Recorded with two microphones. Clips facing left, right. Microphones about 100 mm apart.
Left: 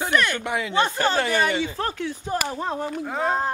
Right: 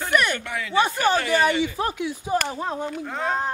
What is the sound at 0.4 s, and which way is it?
Speech, 20° left (ahead or behind).